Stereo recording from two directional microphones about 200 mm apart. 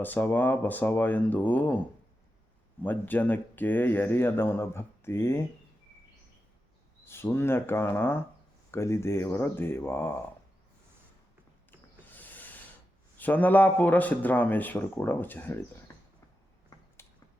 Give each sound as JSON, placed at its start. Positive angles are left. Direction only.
{"t": 0.0, "sound": "speech", "side_deg": 10}
{"t": 2.8, "sound": "speech", "side_deg": 10}
{"t": 7.0, "sound": "speech", "side_deg": 10}
{"t": 11.7, "sound": "a sound", "side_deg": 10}
{"t": 13.1, "sound": "speech", "side_deg": 10}
{"t": 16.7, "sound": "a sound", "side_deg": 15}